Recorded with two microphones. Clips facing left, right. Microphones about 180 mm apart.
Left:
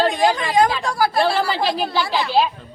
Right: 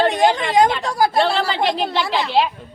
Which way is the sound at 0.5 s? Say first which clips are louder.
Right 1 dB; 20° right (ahead or behind).